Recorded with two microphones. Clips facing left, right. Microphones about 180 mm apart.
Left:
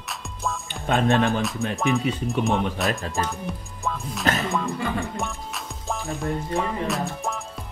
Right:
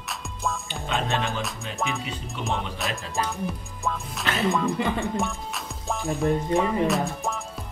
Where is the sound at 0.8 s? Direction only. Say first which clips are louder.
Left 7 dB; 55° left (ahead or behind).